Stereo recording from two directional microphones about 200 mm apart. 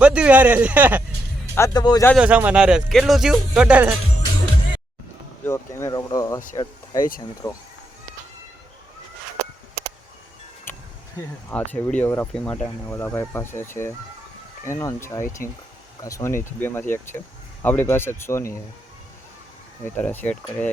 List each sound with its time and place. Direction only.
0.0 s a man's voice: 5° right (ahead or behind)
1.5 s speech: 15° left (ahead or behind)
2.1 s speech: 5° right (ahead or behind)
5.5 s speech: 15° left (ahead or behind)
11.2 s speech: 10° left (ahead or behind)
20.0 s speech: 10° left (ahead or behind)